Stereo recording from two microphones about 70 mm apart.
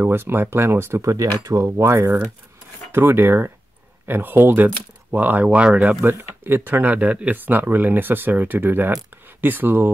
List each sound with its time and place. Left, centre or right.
0.0 s speech: right
6.0 s speech: right